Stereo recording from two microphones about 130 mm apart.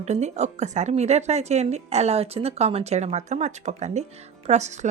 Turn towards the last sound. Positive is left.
turn(degrees=-60)  # may be behind; listen again after turning